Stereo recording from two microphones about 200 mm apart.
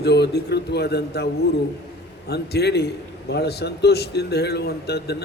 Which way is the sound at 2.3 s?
55° left (ahead or behind).